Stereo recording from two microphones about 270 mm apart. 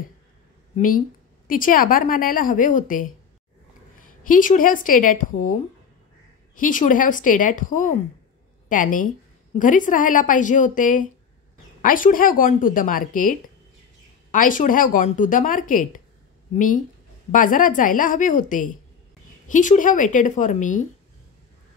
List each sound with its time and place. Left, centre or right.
0.7 s speech: left